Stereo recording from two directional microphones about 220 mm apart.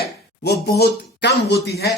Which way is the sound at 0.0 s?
45° left (ahead or behind).